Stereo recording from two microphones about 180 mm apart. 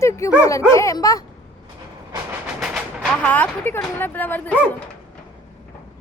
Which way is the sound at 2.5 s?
Centre (ahead or behind).